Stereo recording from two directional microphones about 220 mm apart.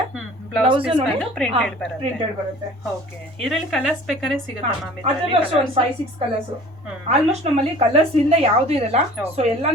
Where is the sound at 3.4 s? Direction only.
Centre (ahead or behind).